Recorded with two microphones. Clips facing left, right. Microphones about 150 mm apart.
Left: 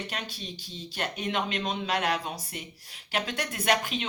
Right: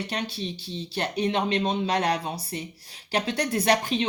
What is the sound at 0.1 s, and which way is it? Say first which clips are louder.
Speech: right 7 dB; 35° right (ahead or behind).